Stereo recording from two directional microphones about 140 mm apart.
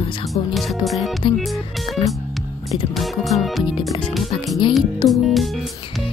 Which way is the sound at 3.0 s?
Centre (ahead or behind).